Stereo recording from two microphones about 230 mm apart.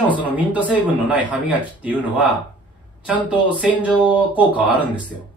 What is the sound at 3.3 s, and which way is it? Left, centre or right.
A man's voice, centre.